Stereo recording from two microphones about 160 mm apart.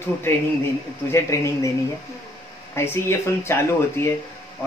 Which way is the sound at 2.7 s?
15° left (ahead or behind).